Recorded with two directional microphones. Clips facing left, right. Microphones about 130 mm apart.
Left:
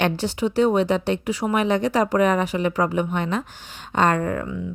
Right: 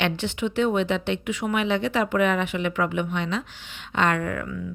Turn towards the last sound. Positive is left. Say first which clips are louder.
# left 3 dB
turn(degrees=30)  # may be behind; listen again after turning